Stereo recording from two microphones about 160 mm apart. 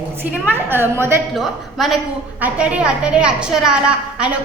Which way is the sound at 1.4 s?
Centre (ahead or behind).